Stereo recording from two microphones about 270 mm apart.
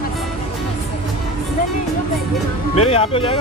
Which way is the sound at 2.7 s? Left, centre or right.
Left.